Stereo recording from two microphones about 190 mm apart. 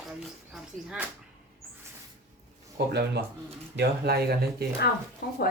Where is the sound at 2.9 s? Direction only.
60° right (ahead or behind).